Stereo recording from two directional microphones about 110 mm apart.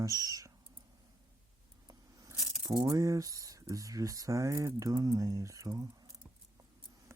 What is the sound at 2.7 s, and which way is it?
Speech, 35° right (ahead or behind).